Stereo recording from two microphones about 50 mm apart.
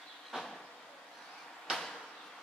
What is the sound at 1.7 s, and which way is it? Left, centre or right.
Drawer open or close, centre.